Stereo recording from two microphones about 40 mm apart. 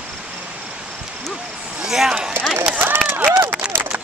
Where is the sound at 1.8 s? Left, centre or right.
Centre.